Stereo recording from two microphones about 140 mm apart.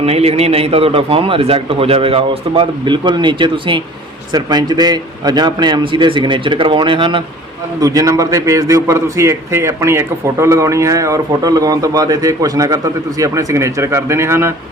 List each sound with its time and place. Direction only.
0.0 s a man's voice: 45° right (ahead or behind)
7.8 s a man's voice: 25° right (ahead or behind)